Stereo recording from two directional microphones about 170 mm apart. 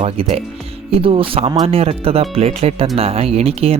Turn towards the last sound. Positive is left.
turn(degrees=-35)  # may be behind; listen again after turning